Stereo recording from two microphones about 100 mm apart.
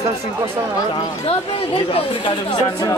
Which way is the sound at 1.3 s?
75° left (ahead or behind).